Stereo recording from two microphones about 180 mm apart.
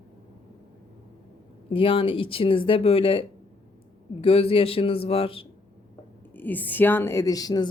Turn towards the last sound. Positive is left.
turn(degrees=20)  # may be behind; listen again after turning